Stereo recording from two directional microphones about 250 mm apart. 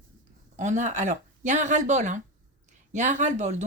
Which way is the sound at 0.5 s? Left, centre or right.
Right.